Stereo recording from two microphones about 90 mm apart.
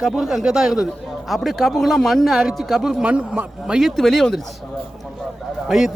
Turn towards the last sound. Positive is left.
turn(degrees=0)  # may be behind; listen again after turning